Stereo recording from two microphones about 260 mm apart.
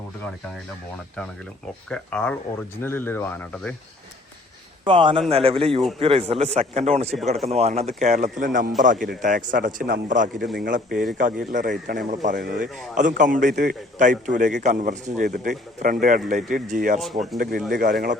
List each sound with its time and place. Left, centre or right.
1.9 s speech: centre
4.9 s a man's voice: centre; by 17.9 s right